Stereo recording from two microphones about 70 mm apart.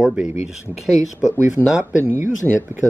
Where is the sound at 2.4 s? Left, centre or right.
Centre.